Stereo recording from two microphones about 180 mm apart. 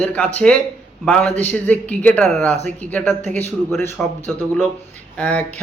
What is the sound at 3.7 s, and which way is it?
Speech, 15° left (ahead or behind).